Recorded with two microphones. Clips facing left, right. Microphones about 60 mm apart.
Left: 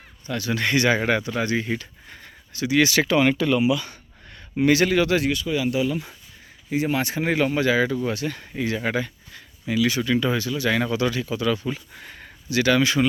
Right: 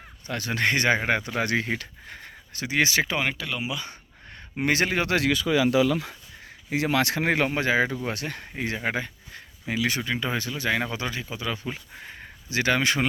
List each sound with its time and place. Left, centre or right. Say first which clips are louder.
0.3 s speech: left 1 dB; right
1.4 s speech: left 1 dB; right
2.9 s speech: left 6 dB; centre
3.7 s speech: left 10 dB; right
4.6 s speech: left 6 dB; right
5.1 s speech: even; right
6.7 s speech: even; right
7.2 s speech: left 2 dB; right
8.0 s speech: left 4 dB; right
8.8 s speech: left 3 dB; right
9.7 s speech: left 4 dB; right
10.0 s speech: left 6 dB; right
10.7 s speech: left 4 dB; centre
12.5 s speech: left 4 dB; right